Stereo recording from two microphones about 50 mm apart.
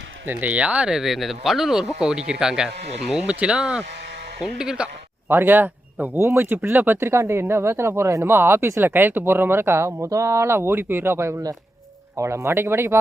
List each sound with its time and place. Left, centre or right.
0.3 s speech: right
0.9 s speech: centre
5.3 s speech: right
6.1 s speech: right
6.7 s speech: right
7.1 s speech: right
8.3 s speech: right
8.9 s speech: right